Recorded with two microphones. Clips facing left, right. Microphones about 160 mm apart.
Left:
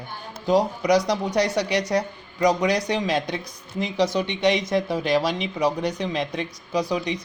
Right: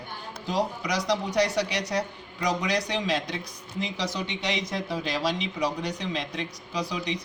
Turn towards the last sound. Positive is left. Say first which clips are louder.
# left 6 dB
turn(degrees=55)  # may be behind; listen again after turning